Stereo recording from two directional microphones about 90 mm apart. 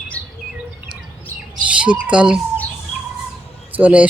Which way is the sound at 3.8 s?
15° right (ahead or behind).